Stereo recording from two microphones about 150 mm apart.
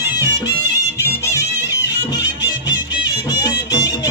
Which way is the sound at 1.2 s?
20° left (ahead or behind).